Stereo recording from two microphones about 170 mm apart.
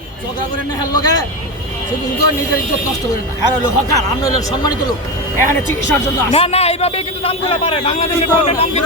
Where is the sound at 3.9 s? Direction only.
20° left (ahead or behind).